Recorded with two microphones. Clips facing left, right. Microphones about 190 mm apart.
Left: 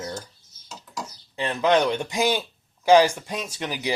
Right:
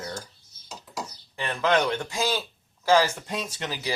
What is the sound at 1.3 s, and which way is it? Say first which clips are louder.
Speech: left 3 dB; 20° left (ahead or behind).